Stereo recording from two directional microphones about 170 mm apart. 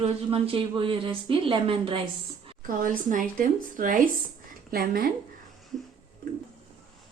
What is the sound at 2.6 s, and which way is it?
Speech, 50° right (ahead or behind).